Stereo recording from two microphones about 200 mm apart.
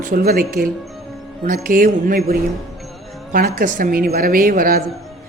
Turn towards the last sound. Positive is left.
turn(degrees=-45)  # may be behind; listen again after turning